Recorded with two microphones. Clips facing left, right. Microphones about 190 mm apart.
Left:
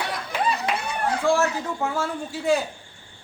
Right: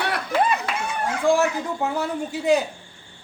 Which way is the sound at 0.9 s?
35° left (ahead or behind).